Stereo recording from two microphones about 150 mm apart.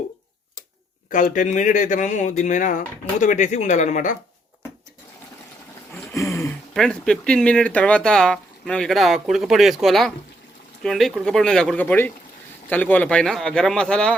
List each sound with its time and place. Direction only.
1.1 s speech: 60° left (ahead or behind)
5.9 s a sound: 20° left (ahead or behind)
6.7 s speech: 5° left (ahead or behind)